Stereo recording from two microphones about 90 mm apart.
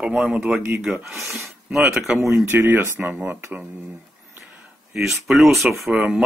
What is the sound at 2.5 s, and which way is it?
Speech, 25° right (ahead or behind).